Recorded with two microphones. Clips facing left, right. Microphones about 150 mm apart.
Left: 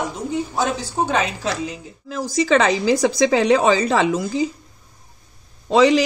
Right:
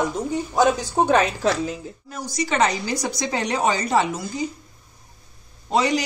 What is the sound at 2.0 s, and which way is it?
A man's voice, 90° left.